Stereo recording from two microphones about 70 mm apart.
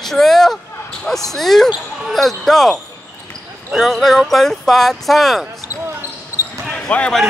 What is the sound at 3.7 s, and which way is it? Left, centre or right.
Speech, centre.